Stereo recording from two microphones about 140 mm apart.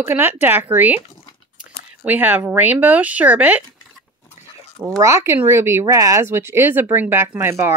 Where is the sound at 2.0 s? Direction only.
10° right (ahead or behind).